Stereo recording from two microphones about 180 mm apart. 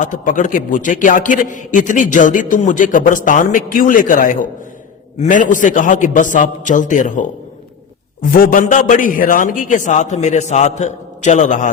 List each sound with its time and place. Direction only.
0.0 s a man's voice: 45° left (ahead or behind)